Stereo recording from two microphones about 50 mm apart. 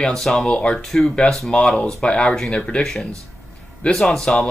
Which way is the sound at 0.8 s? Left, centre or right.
Centre.